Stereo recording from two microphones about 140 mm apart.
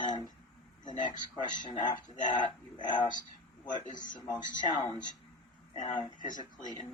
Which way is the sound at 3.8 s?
65° left (ahead or behind).